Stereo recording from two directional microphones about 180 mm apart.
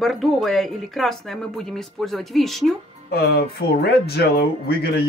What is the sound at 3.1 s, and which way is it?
Speech, 60° left (ahead or behind).